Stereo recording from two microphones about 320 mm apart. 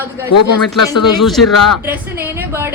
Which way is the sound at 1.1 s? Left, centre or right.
Centre.